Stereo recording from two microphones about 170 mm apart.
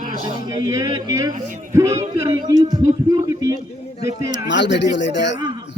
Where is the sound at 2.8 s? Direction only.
20° right (ahead or behind).